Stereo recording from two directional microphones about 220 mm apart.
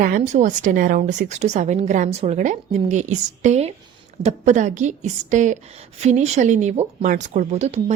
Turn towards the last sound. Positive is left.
turn(degrees=-30)  # may be behind; listen again after turning